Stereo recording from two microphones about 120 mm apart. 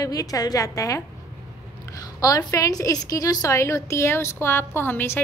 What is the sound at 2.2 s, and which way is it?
A woman's voice, 30° left (ahead or behind).